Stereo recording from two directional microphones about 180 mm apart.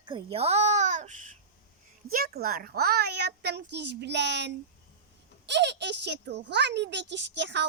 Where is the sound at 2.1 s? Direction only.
55° right (ahead or behind).